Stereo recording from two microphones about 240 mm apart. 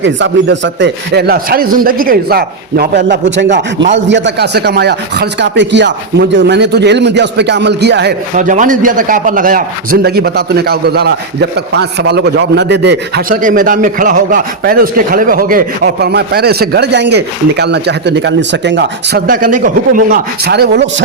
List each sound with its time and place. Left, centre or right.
0.0 s a man's voice: right
8.4 s a man's voice: right